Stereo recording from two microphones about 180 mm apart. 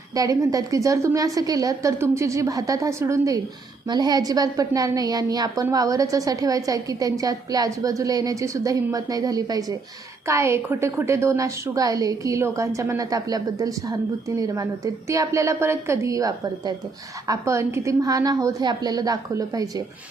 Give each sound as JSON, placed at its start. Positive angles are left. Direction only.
{"t": 0.1, "sound": "a woman's voice", "side_deg": -20}